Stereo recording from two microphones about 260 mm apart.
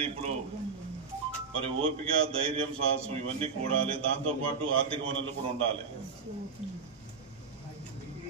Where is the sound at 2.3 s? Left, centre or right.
Right.